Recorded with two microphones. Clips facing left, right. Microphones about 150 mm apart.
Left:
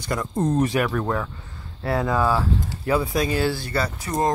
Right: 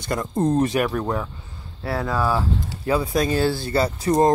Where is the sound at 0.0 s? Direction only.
25° right (ahead or behind).